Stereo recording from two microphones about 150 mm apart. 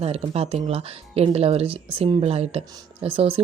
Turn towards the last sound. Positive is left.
turn(degrees=-35)  # may be behind; listen again after turning